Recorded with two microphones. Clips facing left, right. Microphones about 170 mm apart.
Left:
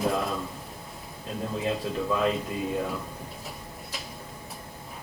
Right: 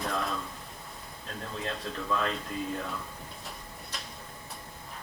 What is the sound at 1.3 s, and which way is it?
Speech, 5° left (ahead or behind).